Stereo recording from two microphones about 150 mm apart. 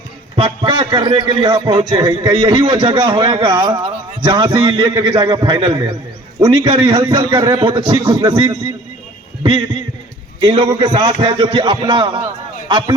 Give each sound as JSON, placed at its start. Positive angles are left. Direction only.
{"t": 0.3, "sound": "a man's voice", "side_deg": -35}
{"t": 9.4, "sound": "a sound", "side_deg": -35}
{"t": 10.4, "sound": "a man's voice", "side_deg": -30}